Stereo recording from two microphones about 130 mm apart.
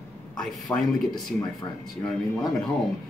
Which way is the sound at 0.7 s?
25° left (ahead or behind).